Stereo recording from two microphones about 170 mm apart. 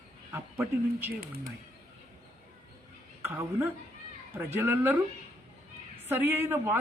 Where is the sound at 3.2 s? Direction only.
15° right (ahead or behind).